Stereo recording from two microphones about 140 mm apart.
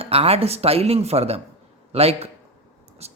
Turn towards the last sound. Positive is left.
turn(degrees=-50)  # may be behind; listen again after turning